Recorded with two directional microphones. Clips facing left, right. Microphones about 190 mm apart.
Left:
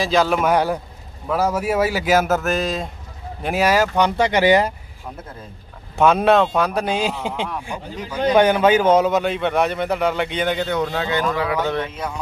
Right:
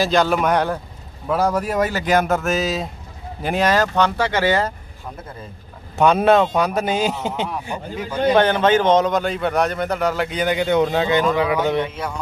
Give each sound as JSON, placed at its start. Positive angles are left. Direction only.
{"t": 0.0, "sound": "a man's voice", "side_deg": 0}
{"t": 5.9, "sound": "a man's voice", "side_deg": 0}
{"t": 8.4, "sound": "a man's voice", "side_deg": 10}
{"t": 10.7, "sound": "speech", "side_deg": -20}